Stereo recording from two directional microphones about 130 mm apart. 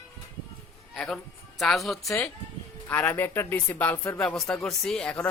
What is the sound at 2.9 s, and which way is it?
Speech, 10° left (ahead or behind).